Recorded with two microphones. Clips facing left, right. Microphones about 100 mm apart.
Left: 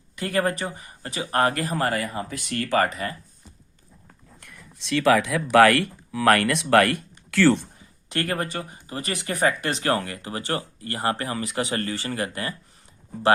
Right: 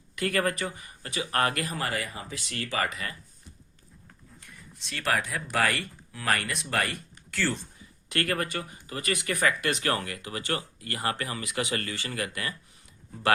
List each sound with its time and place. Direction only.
0.2 s speech: 25° left (ahead or behind)
1.7 s speech: 45° left (ahead or behind)
2.9 s speech: 35° left (ahead or behind)
4.4 s speech: 80° left
8.1 s speech: 25° left (ahead or behind)